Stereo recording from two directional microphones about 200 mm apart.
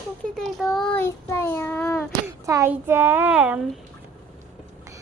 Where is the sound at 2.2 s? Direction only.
15° right (ahead or behind).